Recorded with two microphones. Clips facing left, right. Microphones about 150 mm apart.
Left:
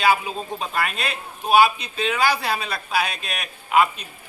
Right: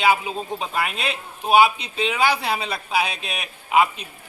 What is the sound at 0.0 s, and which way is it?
A man's voice, 20° right (ahead or behind).